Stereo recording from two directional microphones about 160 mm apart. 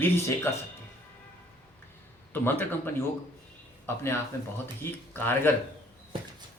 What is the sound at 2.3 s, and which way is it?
Speech, 15° left (ahead or behind).